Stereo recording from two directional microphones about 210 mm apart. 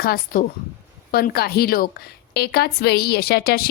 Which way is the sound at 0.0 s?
45° left (ahead or behind).